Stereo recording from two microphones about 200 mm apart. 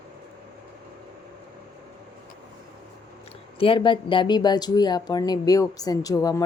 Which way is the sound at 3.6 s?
25° left (ahead or behind).